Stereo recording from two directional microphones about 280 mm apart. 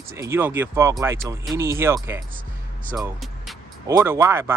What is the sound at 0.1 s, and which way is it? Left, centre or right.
Speech, centre.